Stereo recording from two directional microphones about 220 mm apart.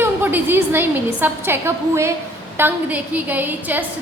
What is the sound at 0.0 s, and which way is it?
A woman's voice, 10° right (ahead or behind).